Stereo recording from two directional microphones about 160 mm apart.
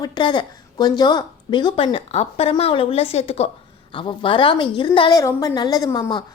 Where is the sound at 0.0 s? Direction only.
30° left (ahead or behind).